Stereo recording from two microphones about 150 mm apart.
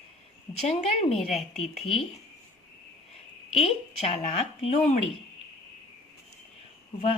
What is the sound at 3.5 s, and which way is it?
Speech, 45° left (ahead or behind).